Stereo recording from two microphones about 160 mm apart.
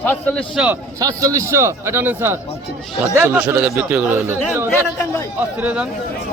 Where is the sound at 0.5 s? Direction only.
5° right (ahead or behind).